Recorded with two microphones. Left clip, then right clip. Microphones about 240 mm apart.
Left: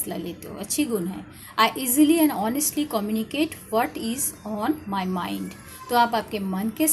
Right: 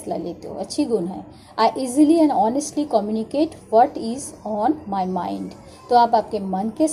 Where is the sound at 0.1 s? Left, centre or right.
Left.